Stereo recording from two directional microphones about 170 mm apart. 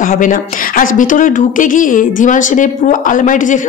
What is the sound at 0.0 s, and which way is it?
Speech, 50° left (ahead or behind).